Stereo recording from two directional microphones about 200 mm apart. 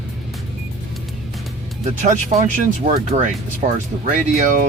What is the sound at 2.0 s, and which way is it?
Speech, 40° right (ahead or behind).